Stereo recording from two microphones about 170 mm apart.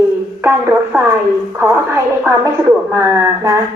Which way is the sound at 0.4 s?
10° right (ahead or behind).